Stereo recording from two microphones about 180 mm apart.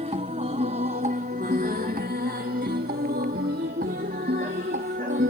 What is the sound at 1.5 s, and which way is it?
Music, 55° right (ahead or behind).